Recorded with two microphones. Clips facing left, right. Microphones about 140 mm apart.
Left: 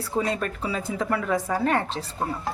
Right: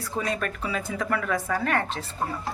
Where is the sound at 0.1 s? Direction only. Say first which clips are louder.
Left 3 dB; 30° left (ahead or behind); by 1.6 s 15° left (ahead or behind).